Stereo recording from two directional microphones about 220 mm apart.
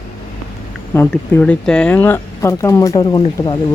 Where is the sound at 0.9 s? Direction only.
10° left (ahead or behind).